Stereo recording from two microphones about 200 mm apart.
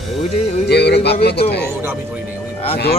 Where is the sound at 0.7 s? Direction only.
55° left (ahead or behind).